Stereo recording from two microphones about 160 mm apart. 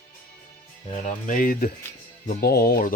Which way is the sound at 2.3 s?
75° left (ahead or behind).